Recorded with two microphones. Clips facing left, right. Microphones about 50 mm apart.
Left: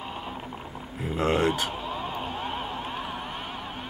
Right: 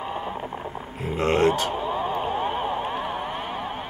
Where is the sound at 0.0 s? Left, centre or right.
Centre.